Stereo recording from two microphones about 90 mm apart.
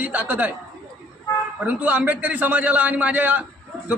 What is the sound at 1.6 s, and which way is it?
A man's voice, 15° right (ahead or behind).